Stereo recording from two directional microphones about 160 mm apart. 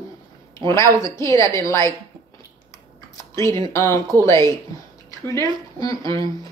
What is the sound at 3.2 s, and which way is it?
Speech, 20° left (ahead or behind).